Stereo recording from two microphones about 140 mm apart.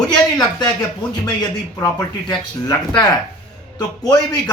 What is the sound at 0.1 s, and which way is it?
A man's voice, 30° left (ahead or behind).